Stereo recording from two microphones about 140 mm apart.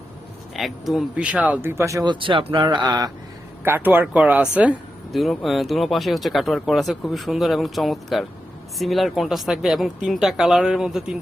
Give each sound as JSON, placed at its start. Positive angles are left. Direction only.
{"t": 0.5, "sound": "speech", "side_deg": 0}
{"t": 2.1, "sound": "speech", "side_deg": -35}
{"t": 3.6, "sound": "speech", "side_deg": -15}
{"t": 5.1, "sound": "speech", "side_deg": 0}